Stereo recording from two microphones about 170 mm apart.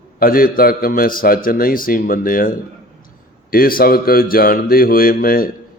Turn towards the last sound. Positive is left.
turn(degrees=60)  # may be behind; listen again after turning